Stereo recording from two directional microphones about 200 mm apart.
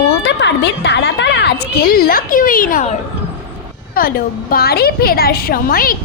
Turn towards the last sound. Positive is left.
turn(degrees=45)  # may be behind; listen again after turning